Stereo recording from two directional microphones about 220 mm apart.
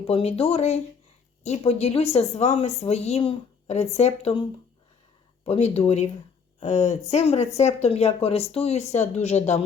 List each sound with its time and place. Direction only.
0.1 s a woman's voice: 30° left (ahead or behind)
5.5 s a woman's voice: 30° left (ahead or behind)